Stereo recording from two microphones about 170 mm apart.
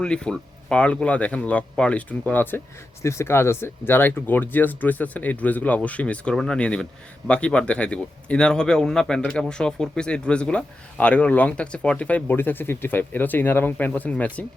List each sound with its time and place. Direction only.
0.0 s speech: 5° left (ahead or behind)